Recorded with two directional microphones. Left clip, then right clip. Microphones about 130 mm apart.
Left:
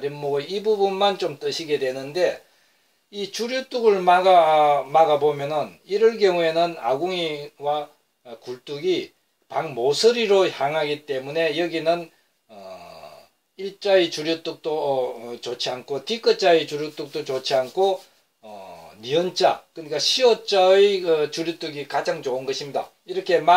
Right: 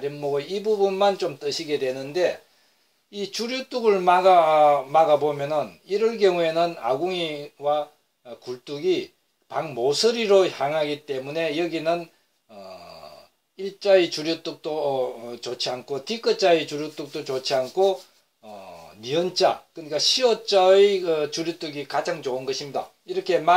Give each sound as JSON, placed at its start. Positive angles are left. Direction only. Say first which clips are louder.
{"t": 0.0, "sound": "speech", "louder": "left 1 dB", "side_deg": -20}
{"t": 13.6, "sound": "speech", "louder": "even", "side_deg": -35}
{"t": 19.1, "sound": "speech", "louder": "left 2 dB", "side_deg": -20}